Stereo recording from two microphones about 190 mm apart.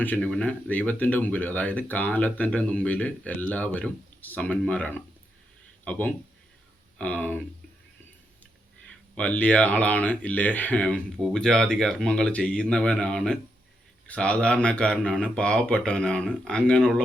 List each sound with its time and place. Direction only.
0.0 s speech: 5° left (ahead or behind)
8.9 s speech: 5° left (ahead or behind)